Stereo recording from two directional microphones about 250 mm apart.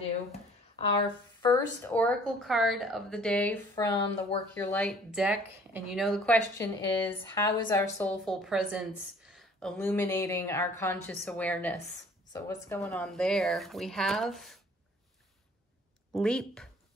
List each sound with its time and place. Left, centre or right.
0.3 s a sound: left
1.0 s a woman's voice: centre
4.6 s a woman's voice: centre
16.2 s a woman's voice: centre